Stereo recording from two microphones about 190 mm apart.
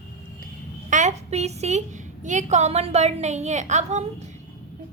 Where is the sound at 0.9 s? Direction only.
40° right (ahead or behind).